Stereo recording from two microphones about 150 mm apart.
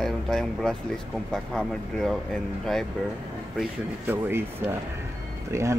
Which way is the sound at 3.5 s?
10° right (ahead or behind).